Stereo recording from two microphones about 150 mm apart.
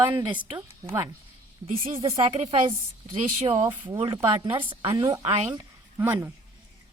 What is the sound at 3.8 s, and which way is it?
A woman's voice, 30° right (ahead or behind).